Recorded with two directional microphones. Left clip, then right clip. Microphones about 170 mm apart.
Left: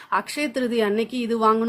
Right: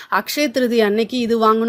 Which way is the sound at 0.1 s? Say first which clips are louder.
Right 5 dB; 25° right (ahead or behind).